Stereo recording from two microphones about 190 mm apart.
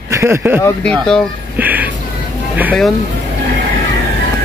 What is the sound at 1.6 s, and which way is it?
Music, 10° right (ahead or behind).